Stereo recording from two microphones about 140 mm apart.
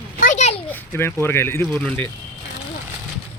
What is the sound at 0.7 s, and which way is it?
Speech, 15° left (ahead or behind).